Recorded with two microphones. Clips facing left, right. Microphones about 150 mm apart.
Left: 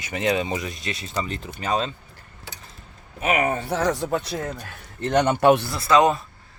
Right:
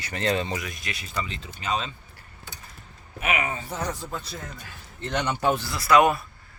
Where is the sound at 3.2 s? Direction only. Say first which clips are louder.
Left 6 dB; 40° left (ahead or behind).